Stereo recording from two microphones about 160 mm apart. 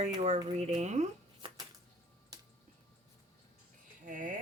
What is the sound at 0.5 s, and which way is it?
Speech, 45° right (ahead or behind).